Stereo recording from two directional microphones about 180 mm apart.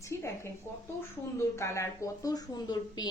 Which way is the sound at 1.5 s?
15° left (ahead or behind).